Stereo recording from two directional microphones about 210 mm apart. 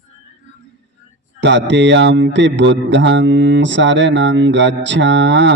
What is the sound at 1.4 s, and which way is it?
Speech, 60° right (ahead or behind).